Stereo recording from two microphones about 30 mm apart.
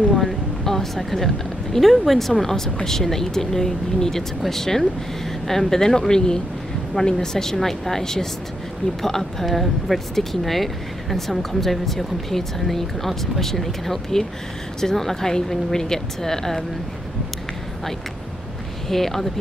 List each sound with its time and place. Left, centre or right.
0.1 s a woman's voice: centre
7.5 s speech: centre
18.9 s speech: centre